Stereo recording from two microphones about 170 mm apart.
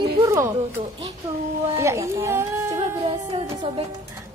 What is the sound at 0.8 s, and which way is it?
Speech, 30° right (ahead or behind).